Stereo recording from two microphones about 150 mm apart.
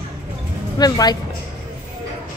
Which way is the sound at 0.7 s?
25° left (ahead or behind).